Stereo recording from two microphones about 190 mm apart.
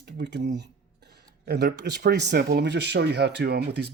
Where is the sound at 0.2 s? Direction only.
65° right (ahead or behind).